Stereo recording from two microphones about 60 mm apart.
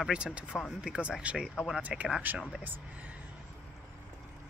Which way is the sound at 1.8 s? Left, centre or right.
Right.